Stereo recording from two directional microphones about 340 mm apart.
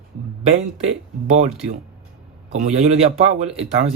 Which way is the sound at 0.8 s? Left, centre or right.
Centre.